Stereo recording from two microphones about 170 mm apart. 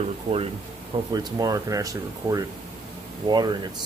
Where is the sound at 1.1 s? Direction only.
20° right (ahead or behind).